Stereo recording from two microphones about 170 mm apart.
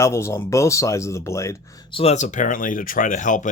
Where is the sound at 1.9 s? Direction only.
35° left (ahead or behind).